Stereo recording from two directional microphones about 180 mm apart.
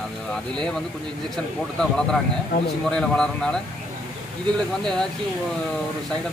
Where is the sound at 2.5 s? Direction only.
55° left (ahead or behind).